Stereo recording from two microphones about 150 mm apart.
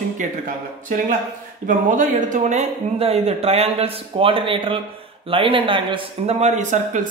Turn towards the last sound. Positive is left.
turn(degrees=-55)  # may be behind; listen again after turning